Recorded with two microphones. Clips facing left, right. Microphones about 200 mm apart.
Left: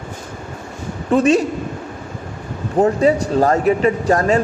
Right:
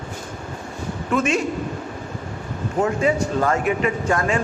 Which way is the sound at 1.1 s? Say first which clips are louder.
Left 7 dB; 35° left (ahead or behind).